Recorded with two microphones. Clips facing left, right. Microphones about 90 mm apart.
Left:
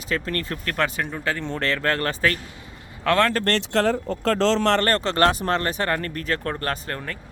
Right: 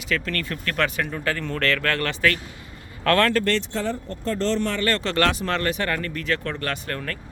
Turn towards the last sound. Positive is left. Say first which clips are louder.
# left 1 dB
turn(degrees=30)  # may be behind; listen again after turning